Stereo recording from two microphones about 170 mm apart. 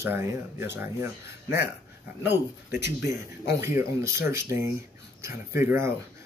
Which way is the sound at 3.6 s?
15° right (ahead or behind).